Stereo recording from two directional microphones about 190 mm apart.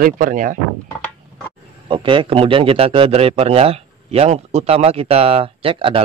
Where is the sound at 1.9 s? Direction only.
25° right (ahead or behind).